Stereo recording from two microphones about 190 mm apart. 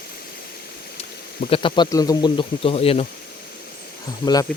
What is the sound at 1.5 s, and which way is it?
Speech, 25° left (ahead or behind).